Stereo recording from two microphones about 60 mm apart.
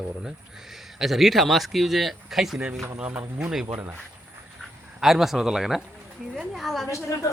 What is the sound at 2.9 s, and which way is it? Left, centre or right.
Speech, right.